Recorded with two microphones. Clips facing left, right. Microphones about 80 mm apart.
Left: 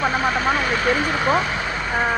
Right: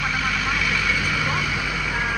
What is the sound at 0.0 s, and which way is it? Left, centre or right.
Vehicle, left.